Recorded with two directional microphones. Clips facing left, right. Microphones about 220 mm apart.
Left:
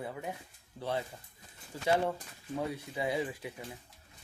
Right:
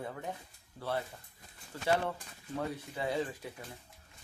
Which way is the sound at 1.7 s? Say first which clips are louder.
Left 3 dB; 15° left (ahead or behind).